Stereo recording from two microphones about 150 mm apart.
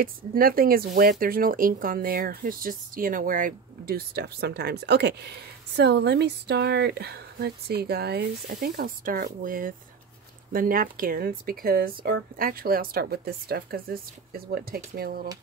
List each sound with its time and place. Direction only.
0.0 s speech: 75° right (ahead or behind)